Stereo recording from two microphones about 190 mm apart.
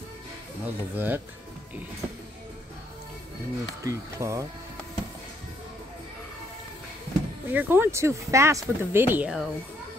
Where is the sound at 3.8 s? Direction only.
15° right (ahead or behind).